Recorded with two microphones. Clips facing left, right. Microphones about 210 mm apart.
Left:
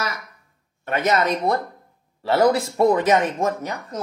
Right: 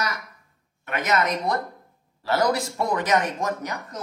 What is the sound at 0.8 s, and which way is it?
A woman's voice, 35° left (ahead or behind).